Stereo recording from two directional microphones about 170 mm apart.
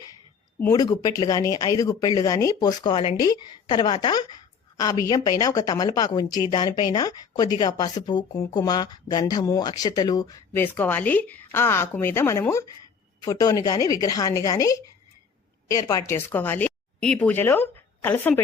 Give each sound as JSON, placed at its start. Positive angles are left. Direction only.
{"t": 0.7, "sound": "speech", "side_deg": 20}